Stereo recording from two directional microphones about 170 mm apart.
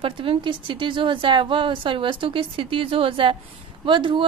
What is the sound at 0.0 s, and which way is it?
A woman's voice, 30° right (ahead or behind).